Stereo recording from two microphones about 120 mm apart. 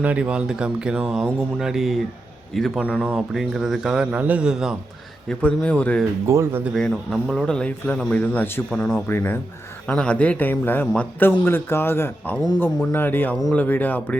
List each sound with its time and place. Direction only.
0.0 s a man's voice: 10° right (ahead or behind)
5.3 s a man's voice: 10° left (ahead or behind)
6.2 s speech: 20° right (ahead or behind)
6.7 s a man's voice: 5° left (ahead or behind)